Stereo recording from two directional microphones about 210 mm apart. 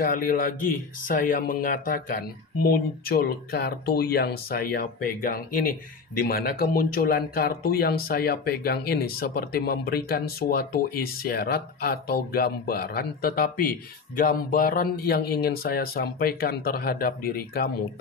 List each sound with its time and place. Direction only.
0.0 s speech: 45° left (ahead or behind)